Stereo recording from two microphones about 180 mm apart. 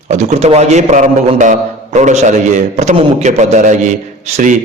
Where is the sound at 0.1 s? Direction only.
40° right (ahead or behind).